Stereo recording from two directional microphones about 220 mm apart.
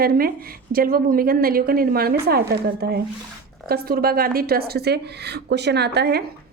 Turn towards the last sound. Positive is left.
turn(degrees=-50)  # may be behind; listen again after turning